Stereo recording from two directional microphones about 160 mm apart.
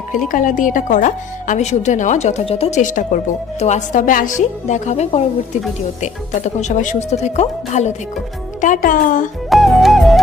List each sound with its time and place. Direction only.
0.3 s a woman's voice: 60° left (ahead or behind)
8.6 s speech: 55° left (ahead or behind)
9.5 s music: centre (ahead or behind)